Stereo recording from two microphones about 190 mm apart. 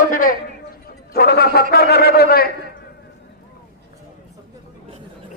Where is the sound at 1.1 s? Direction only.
55° left (ahead or behind).